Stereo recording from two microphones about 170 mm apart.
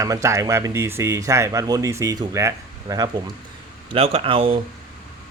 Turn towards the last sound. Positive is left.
turn(degrees=-30)  # may be behind; listen again after turning